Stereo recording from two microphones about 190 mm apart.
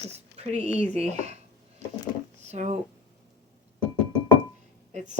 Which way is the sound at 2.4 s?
35° right (ahead or behind).